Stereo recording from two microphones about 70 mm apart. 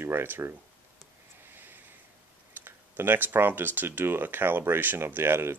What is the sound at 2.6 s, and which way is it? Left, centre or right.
Speech, right.